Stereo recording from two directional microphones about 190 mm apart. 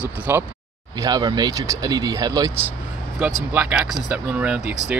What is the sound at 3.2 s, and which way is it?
Speech, 5° right (ahead or behind).